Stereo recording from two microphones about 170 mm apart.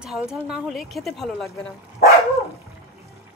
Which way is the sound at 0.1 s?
5° right (ahead or behind).